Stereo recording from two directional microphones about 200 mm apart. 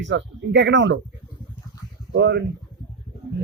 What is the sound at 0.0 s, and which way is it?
Speech, 60° right (ahead or behind).